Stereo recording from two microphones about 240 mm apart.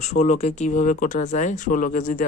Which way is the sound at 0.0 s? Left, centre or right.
Left.